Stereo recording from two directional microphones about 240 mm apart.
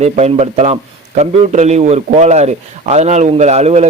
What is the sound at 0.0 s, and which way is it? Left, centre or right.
A man's voice, right.